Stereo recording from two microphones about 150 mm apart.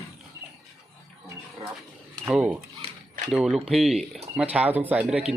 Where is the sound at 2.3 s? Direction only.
5° right (ahead or behind).